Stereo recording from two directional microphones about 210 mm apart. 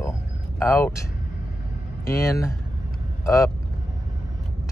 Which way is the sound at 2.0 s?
15° left (ahead or behind).